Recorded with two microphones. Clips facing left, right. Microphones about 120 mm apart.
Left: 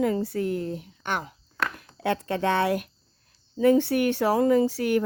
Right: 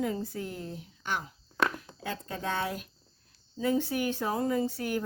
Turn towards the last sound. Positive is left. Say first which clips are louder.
# left 8 dB
turn(degrees=80)